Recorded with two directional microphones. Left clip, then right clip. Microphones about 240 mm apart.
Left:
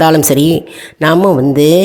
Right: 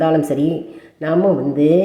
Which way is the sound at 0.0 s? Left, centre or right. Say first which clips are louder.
Left 7 dB; left.